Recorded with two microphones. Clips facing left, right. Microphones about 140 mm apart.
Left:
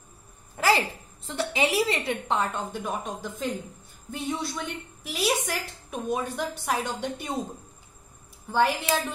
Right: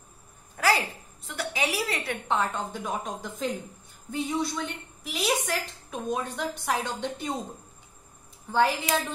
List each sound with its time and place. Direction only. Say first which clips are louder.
1.2 s a woman's voice: left 4 dB; 25° left (ahead or behind)
2.2 s a woman's voice: even; centre (ahead or behind)
8.5 s a woman's voice: even; 5° left (ahead or behind)